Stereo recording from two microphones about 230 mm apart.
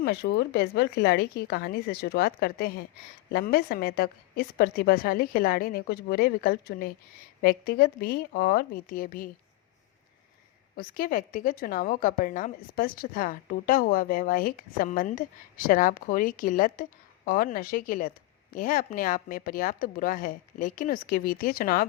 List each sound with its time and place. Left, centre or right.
0.0 s a woman's voice: left
10.8 s a woman's voice: left